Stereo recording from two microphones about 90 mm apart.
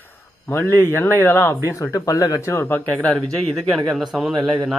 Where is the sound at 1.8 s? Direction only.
40° left (ahead or behind).